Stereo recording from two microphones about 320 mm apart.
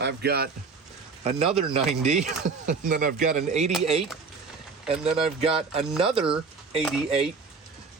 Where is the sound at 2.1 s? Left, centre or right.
Right.